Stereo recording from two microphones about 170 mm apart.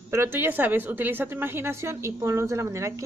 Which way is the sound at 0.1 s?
15° right (ahead or behind).